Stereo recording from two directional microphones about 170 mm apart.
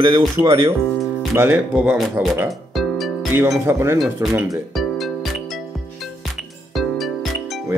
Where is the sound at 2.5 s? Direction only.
Centre (ahead or behind).